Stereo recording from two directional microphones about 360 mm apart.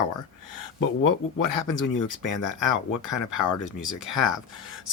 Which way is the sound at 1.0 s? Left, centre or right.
Left.